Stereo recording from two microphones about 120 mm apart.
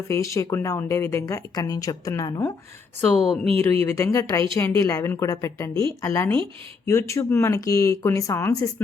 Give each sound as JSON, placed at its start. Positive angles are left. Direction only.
{"t": 0.1, "sound": "speech", "side_deg": 25}
{"t": 3.2, "sound": "speech", "side_deg": 5}
{"t": 3.6, "sound": "speech", "side_deg": 20}